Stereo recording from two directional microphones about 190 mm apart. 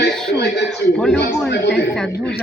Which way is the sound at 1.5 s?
65° left (ahead or behind).